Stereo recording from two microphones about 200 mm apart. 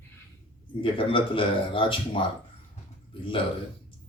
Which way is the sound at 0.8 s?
25° left (ahead or behind).